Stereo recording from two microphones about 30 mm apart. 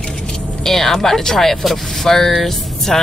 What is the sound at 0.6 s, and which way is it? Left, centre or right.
Speech, centre.